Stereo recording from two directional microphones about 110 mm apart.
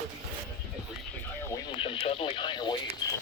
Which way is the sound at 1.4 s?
25° left (ahead or behind).